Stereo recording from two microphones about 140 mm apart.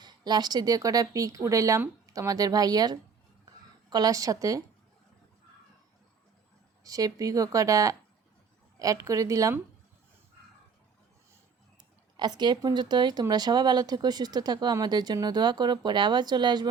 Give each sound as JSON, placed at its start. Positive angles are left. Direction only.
{"t": 0.0, "sound": "speech", "side_deg": -30}
{"t": 6.8, "sound": "speech", "side_deg": -25}
{"t": 12.1, "sound": "speech", "side_deg": -30}